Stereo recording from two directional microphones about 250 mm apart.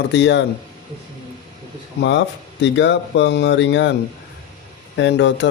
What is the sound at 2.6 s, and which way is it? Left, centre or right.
Speech, left.